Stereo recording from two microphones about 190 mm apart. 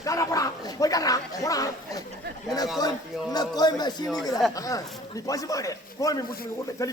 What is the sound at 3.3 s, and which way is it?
A man's voice, 20° left (ahead or behind).